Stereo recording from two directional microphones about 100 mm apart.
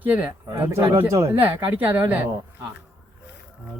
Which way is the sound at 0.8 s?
55° right (ahead or behind).